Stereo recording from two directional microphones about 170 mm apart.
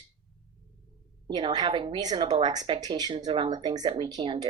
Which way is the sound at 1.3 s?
25° right (ahead or behind).